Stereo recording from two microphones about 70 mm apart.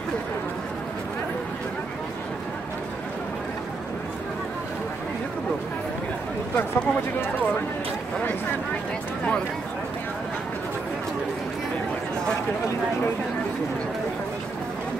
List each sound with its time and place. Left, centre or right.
6.5 s speech: centre